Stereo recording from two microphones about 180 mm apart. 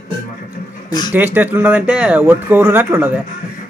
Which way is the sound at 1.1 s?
10° right (ahead or behind).